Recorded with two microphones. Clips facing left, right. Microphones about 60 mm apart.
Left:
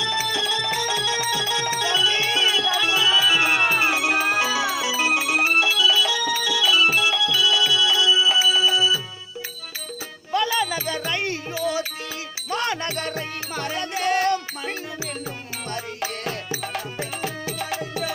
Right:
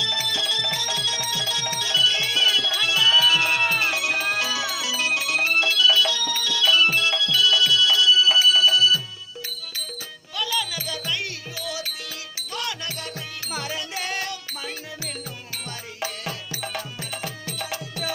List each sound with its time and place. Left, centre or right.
0.0 s music: left
10.3 s music: left
12.4 s music: left
13.5 s music: centre
17.2 s music: left